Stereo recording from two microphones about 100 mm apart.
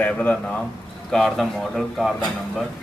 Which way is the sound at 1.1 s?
5° left (ahead or behind).